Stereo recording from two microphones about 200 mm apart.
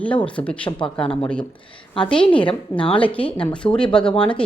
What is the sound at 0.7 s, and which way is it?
Speech, 25° left (ahead or behind).